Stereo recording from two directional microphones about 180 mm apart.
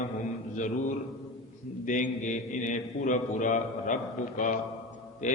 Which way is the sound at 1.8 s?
45° left (ahead or behind).